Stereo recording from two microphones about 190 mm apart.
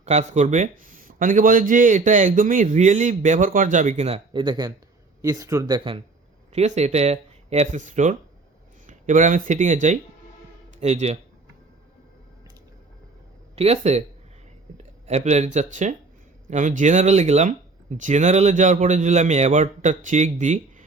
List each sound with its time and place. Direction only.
0.0 s a man's voice: 35° right (ahead or behind)
6.5 s a man's voice: 35° right (ahead or behind)
13.6 s a man's voice: 35° right (ahead or behind)
15.0 s a man's voice: 35° right (ahead or behind)